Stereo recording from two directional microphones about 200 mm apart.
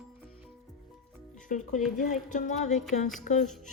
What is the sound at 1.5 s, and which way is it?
A woman's voice, 40° left (ahead or behind).